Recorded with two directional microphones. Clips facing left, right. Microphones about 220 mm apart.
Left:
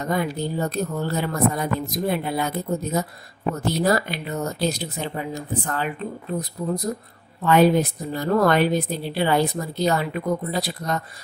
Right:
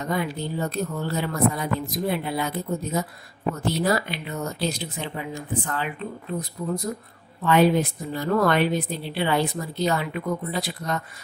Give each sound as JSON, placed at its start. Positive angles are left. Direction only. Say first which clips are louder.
{"t": 0.0, "sound": "speech", "louder": "left 3 dB", "side_deg": 45}
{"t": 7.4, "sound": "speech", "louder": "left 2 dB", "side_deg": 40}